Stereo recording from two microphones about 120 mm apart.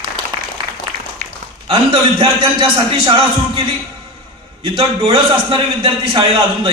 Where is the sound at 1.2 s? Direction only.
90° right.